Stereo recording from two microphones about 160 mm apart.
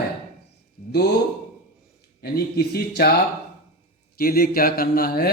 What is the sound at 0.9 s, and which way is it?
Speech, 90° left.